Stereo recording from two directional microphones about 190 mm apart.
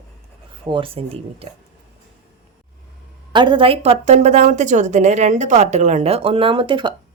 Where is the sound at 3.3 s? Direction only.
25° right (ahead or behind).